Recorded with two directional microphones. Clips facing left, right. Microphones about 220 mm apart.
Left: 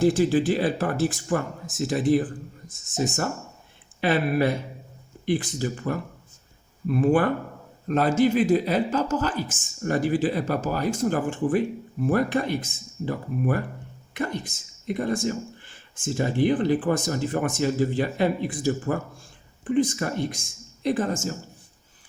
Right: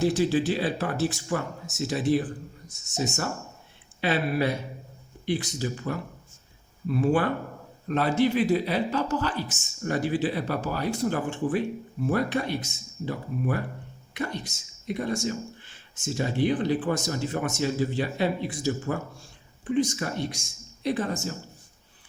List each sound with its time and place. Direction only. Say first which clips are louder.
0.0 s speech: left 3 dB; 50° left (ahead or behind)